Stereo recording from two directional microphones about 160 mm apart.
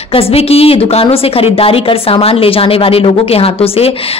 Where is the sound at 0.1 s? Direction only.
35° left (ahead or behind).